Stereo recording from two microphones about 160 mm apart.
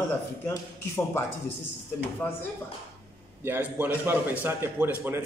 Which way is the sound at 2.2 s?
10° left (ahead or behind).